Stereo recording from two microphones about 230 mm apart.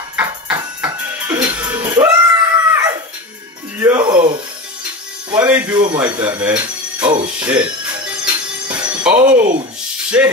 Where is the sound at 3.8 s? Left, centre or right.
Centre.